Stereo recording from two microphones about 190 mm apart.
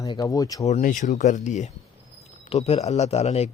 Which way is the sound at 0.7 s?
45° left (ahead or behind).